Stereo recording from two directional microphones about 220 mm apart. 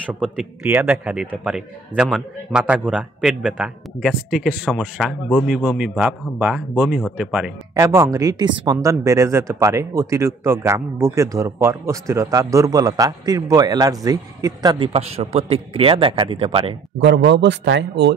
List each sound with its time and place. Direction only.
0.0 s a man's voice: 5° right (ahead or behind); by 16.7 s 25° right (ahead or behind)
17.0 s speech: 50° right (ahead or behind)